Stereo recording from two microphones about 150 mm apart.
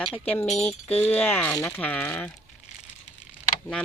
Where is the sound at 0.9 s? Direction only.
10° left (ahead or behind).